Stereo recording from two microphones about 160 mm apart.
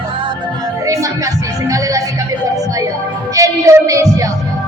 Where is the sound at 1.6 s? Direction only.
20° right (ahead or behind).